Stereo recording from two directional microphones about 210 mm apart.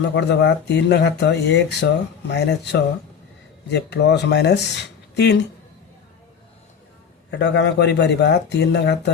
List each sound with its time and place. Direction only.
0.1 s speech: 55° left (ahead or behind)
7.3 s speech: 55° left (ahead or behind)